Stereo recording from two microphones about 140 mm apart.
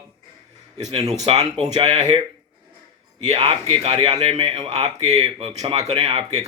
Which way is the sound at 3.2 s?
35° right (ahead or behind).